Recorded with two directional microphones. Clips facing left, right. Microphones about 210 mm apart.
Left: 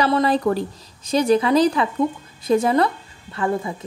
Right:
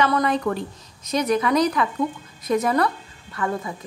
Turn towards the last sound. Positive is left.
turn(degrees=30)  # may be behind; listen again after turning